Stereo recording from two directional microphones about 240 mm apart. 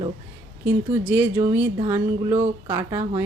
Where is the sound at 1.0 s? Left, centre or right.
Centre.